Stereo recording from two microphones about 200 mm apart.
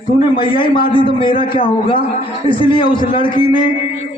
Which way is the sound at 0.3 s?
25° left (ahead or behind).